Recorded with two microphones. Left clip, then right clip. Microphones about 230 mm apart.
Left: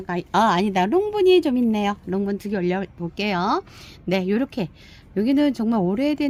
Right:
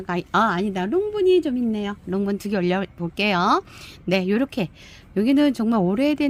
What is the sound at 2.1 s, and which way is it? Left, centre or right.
Speech, centre.